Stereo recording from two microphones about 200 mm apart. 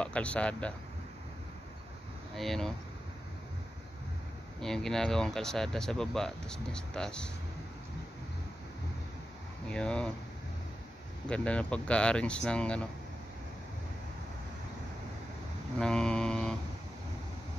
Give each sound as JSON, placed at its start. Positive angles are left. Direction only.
{"t": 0.0, "sound": "speech", "side_deg": 5}
{"t": 2.3, "sound": "speech", "side_deg": 0}
{"t": 4.6, "sound": "speech", "side_deg": 0}
{"t": 9.7, "sound": "speech", "side_deg": 5}
{"t": 11.2, "sound": "speech", "side_deg": 5}
{"t": 15.8, "sound": "mantra", "side_deg": 5}